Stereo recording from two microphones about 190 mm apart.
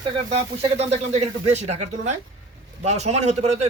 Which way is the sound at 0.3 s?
35° right (ahead or behind).